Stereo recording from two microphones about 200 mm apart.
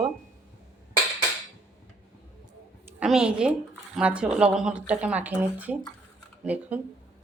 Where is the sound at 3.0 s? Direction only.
5° right (ahead or behind).